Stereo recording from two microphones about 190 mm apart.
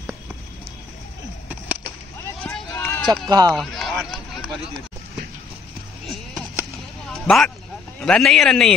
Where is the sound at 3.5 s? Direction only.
Centre (ahead or behind).